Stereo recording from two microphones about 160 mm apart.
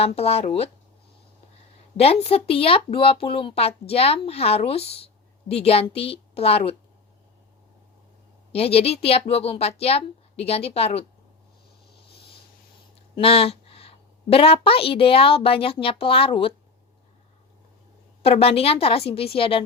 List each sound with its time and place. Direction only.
0.0 s speech: 40° left (ahead or behind)
2.0 s speech: 40° left (ahead or behind)
8.5 s speech: 40° left (ahead or behind)
13.1 s speech: 35° left (ahead or behind)
18.2 s speech: 40° left (ahead or behind)